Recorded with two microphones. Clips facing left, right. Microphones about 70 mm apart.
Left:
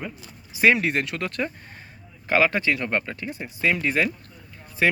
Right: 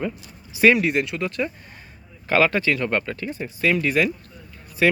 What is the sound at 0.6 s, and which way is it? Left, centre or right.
Speech, left.